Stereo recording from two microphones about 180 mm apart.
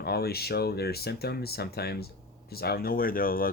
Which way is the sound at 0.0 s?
60° left (ahead or behind).